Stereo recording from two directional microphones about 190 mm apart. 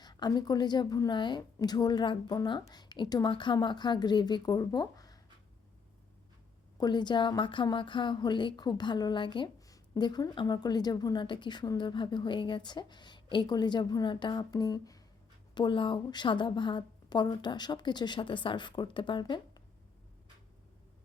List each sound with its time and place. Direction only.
0.0 s speech: 20° left (ahead or behind)
6.7 s speech: 20° left (ahead or behind)